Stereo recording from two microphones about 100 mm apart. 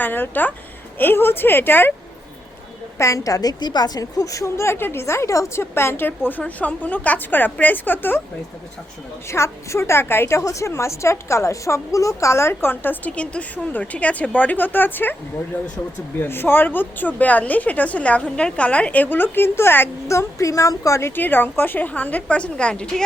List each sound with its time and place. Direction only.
0.0 s a woman's voice: 20° left (ahead or behind)
3.0 s a woman's voice: 35° left (ahead or behind)
9.3 s a woman's voice: 30° left (ahead or behind)
16.2 s a woman's voice: 20° left (ahead or behind)
21.2 s a woman's voice: 20° left (ahead or behind)